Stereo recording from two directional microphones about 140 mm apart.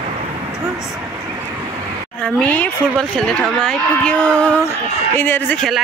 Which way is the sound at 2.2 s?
10° left (ahead or behind).